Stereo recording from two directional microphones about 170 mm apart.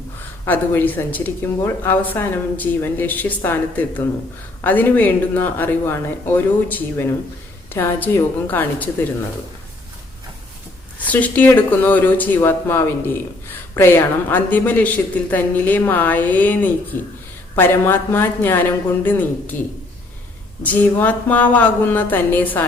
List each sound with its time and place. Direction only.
0.4 s speech: 10° left (ahead or behind)
10.9 s speech: 10° left (ahead or behind)